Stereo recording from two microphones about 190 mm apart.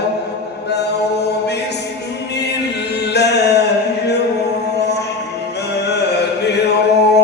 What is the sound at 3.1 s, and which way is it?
Music, 60° left (ahead or behind).